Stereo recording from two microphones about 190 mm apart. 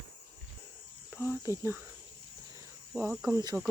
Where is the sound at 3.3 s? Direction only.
15° right (ahead or behind).